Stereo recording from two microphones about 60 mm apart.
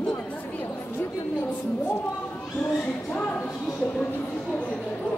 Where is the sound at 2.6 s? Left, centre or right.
Left.